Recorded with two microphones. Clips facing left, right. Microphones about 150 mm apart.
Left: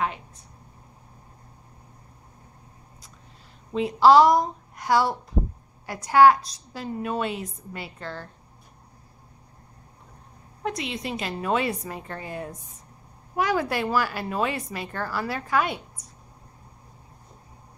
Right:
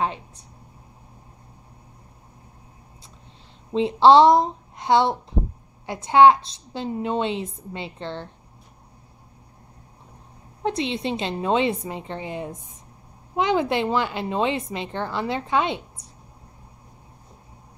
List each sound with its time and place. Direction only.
3.7 s a woman's voice: 25° right (ahead or behind)
10.6 s a woman's voice: 30° right (ahead or behind)